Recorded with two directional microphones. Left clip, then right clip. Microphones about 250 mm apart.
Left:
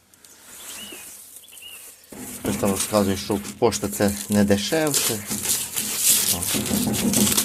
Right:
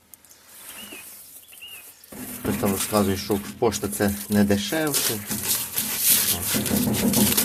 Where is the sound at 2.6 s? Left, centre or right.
Left.